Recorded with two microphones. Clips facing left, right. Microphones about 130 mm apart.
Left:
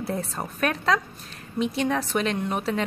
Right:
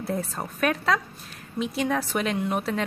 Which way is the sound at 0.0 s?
Centre (ahead or behind).